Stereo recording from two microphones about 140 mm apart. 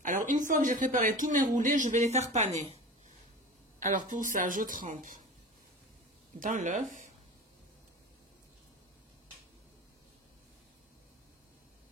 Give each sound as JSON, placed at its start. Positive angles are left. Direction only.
{"t": 0.3, "sound": "speech", "side_deg": -65}
{"t": 3.8, "sound": "speech", "side_deg": -70}
{"t": 6.4, "sound": "speech", "side_deg": -65}